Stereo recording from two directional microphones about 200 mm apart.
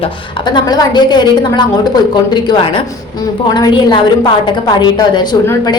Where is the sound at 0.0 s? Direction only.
20° left (ahead or behind).